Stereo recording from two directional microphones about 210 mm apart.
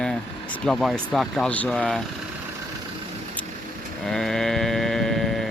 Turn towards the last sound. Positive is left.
turn(degrees=0)  # may be behind; listen again after turning